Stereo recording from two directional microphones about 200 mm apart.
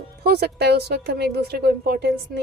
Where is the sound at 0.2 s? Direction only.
50° right (ahead or behind).